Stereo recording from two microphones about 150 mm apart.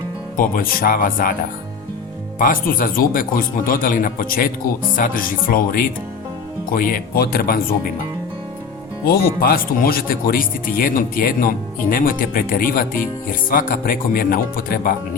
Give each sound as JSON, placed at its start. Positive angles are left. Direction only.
{"t": 0.3, "sound": "speech", "side_deg": 75}
{"t": 2.4, "sound": "speech", "side_deg": 65}
{"t": 9.0, "sound": "speech", "side_deg": 80}